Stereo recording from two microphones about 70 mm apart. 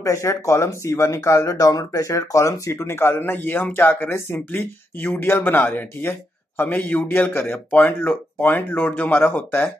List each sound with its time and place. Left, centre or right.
0.0 s speech: left